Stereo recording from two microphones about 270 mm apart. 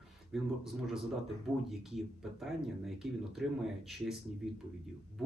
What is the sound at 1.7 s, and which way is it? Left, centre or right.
Speech, centre.